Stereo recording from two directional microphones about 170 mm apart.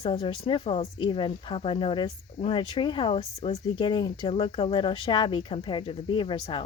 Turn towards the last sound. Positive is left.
turn(degrees=30)  # may be behind; listen again after turning